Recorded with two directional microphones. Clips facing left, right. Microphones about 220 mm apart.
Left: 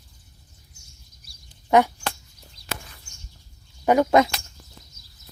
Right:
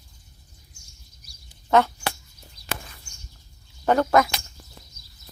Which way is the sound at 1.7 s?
15° left (ahead or behind).